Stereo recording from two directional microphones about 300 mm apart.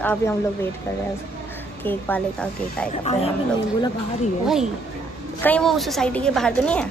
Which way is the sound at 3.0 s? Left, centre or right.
Left.